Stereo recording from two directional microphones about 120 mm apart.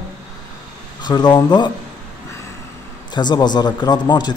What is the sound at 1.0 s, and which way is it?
Speech, 35° left (ahead or behind).